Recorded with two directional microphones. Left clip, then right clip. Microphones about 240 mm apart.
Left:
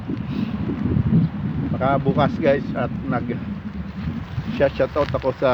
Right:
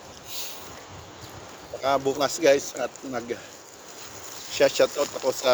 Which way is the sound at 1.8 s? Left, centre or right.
Right.